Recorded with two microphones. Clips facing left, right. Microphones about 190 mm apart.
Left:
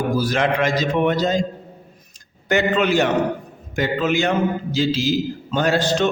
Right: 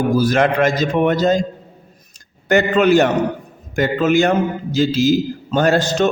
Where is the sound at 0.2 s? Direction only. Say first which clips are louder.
Right 5 dB; 45° right (ahead or behind).